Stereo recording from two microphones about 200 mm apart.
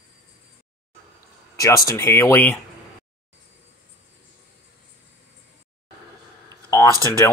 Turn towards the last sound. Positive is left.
turn(degrees=15)  # may be behind; listen again after turning